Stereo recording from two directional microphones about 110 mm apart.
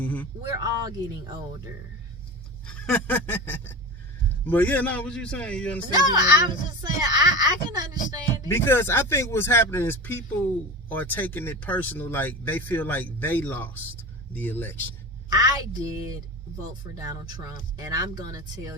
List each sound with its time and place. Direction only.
0.0 s a sound: 15° left (ahead or behind)
0.5 s speech: 35° right (ahead or behind)
2.6 s a sound: 10° left (ahead or behind)
4.4 s speech: 15° left (ahead or behind)
5.9 s speech: 40° right (ahead or behind)
8.4 s speech: 20° left (ahead or behind)
15.3 s speech: 35° right (ahead or behind)